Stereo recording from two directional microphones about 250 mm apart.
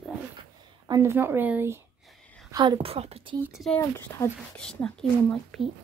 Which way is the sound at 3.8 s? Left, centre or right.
Centre.